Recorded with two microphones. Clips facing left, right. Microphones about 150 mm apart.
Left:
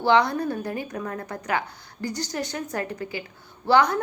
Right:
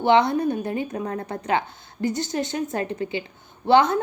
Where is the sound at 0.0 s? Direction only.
20° right (ahead or behind).